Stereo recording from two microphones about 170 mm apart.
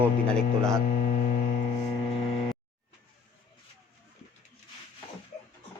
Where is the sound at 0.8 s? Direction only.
50° left (ahead or behind).